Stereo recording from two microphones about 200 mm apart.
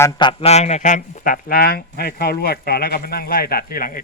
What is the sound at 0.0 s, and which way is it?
Speech, 20° left (ahead or behind).